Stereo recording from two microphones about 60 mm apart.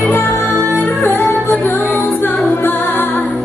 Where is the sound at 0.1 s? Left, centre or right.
Left.